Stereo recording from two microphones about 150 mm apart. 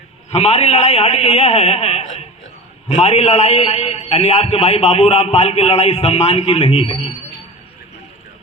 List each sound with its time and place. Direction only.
0.3 s a man's voice: 45° left (ahead or behind)